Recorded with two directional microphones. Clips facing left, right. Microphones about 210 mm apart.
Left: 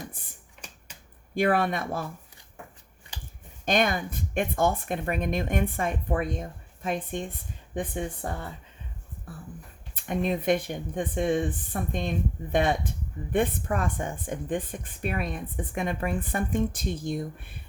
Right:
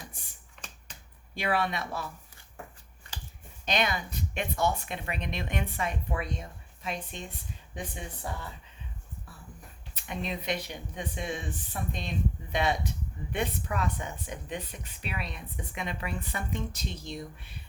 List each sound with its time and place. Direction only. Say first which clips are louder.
1.4 s speech: left 6 dB; 50° left (ahead or behind)
3.7 s speech: left 5 dB; 50° left (ahead or behind)